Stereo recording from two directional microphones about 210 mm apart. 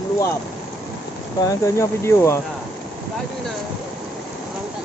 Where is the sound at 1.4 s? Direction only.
15° left (ahead or behind).